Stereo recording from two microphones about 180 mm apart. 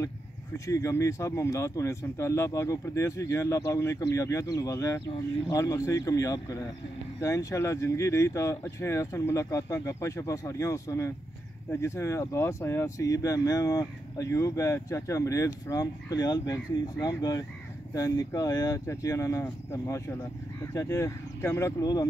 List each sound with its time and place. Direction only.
0.7 s speech: 15° left (ahead or behind)